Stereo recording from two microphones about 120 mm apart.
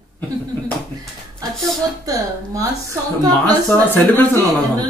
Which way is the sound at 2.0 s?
30° right (ahead or behind).